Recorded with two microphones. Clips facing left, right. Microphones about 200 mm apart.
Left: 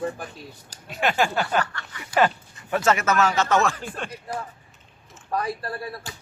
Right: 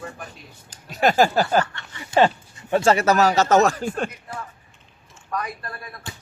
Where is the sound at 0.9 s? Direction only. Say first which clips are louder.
Right 5 dB; 40° right (ahead or behind).